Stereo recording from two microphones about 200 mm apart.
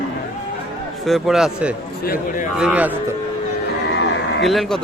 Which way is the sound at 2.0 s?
45° left (ahead or behind).